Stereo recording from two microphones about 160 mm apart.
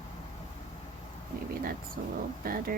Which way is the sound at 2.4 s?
65° right (ahead or behind).